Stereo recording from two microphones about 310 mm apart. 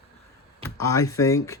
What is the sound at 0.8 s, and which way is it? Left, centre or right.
Speech, centre.